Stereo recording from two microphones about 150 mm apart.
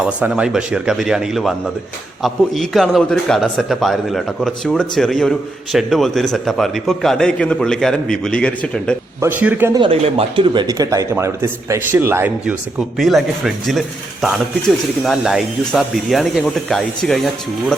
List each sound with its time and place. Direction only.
0.2 s a man's voice: 5° right (ahead or behind)
9.2 s speech: 10° right (ahead or behind)
9.7 s speech: 35° right (ahead or behind); by 12.5 s 15° right (ahead or behind)
13.0 s a man's voice: centre (ahead or behind)